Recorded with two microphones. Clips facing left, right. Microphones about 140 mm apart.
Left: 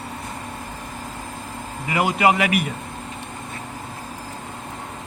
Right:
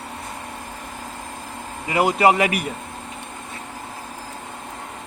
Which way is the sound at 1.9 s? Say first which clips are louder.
Right 2 dB; 35° right (ahead or behind).